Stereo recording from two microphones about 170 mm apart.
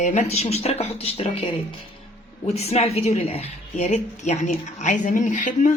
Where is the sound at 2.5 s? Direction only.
40° left (ahead or behind).